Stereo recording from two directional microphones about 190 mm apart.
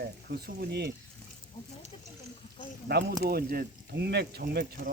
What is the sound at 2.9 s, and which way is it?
Speech, 55° right (ahead or behind).